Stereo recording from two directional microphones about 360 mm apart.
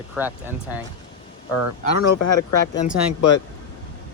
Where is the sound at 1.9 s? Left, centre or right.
Left.